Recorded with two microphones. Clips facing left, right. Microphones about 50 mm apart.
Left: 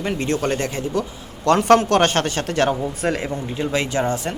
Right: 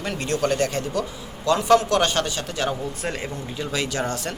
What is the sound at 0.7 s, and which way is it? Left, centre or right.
Speech, centre.